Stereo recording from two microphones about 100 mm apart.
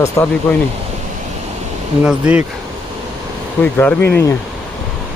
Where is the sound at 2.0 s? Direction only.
15° right (ahead or behind).